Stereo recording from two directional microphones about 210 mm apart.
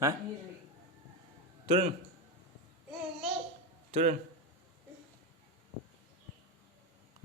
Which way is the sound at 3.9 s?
35° right (ahead or behind).